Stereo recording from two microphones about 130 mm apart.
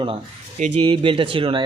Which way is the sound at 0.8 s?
40° right (ahead or behind).